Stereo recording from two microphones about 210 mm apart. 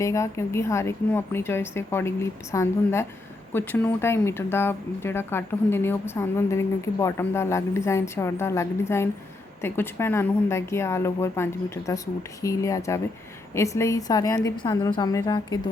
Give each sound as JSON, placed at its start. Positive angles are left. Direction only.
{"t": 0.0, "sound": "speech", "side_deg": 15}